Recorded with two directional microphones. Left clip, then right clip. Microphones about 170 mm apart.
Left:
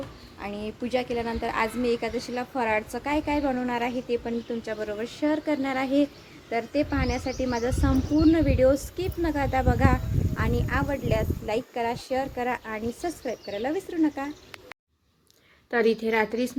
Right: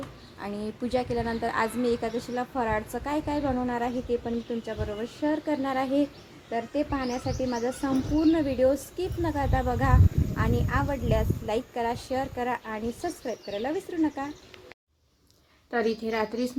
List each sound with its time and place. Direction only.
0.3 s speech: centre (ahead or behind)
15.7 s a woman's voice: 15° left (ahead or behind)